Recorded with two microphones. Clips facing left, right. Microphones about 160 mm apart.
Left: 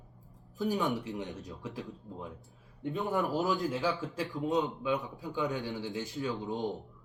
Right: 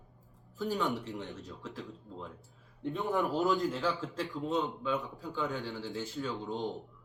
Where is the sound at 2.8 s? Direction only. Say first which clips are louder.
Even; centre (ahead or behind).